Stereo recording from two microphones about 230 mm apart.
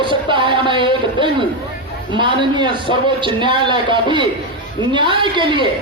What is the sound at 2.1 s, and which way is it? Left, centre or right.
A man's voice, right.